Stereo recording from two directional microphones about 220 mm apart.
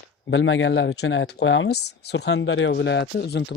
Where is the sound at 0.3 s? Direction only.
55° left (ahead or behind).